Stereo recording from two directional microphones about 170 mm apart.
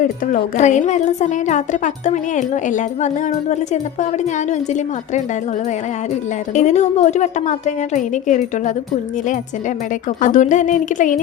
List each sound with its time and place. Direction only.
0.0 s a woman's voice: 50° left (ahead or behind)
6.5 s a woman's voice: 45° left (ahead or behind)